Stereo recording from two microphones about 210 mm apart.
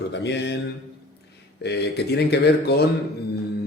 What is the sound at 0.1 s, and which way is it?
Speech, 55° left (ahead or behind).